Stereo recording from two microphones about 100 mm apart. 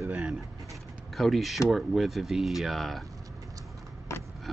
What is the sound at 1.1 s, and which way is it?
Speech, centre (ahead or behind).